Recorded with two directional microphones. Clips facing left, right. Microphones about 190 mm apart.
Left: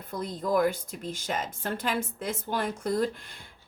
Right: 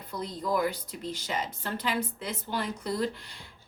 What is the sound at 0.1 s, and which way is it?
A woman's voice, 50° left (ahead or behind).